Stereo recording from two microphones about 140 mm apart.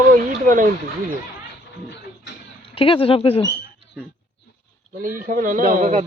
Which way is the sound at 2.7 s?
40° left (ahead or behind).